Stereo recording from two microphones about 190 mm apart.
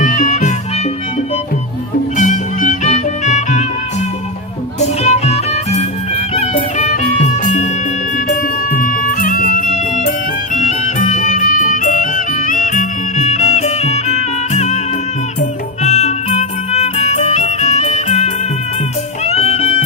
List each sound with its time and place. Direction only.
0.0 s music: 40° left (ahead or behind)
2.1 s music: 40° left (ahead or behind)
4.8 s music: 35° left (ahead or behind)